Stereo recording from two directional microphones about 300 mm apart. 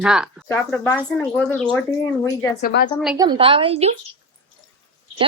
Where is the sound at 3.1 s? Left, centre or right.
Centre.